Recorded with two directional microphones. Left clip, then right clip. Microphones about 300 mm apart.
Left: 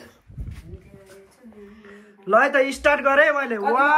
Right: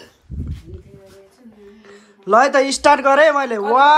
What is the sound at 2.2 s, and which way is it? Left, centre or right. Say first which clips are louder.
A woman's voice: right 4 dB; centre.